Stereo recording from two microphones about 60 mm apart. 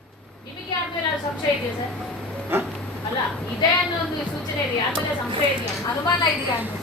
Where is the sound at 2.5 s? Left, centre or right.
Right.